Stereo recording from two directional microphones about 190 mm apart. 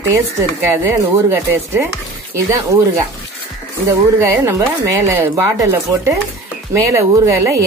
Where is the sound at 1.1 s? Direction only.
15° right (ahead or behind).